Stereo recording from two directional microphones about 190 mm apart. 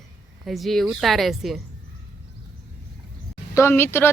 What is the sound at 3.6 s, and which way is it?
Speech, 10° left (ahead or behind).